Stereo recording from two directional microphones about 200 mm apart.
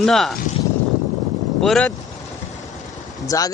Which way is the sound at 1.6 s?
5° left (ahead or behind).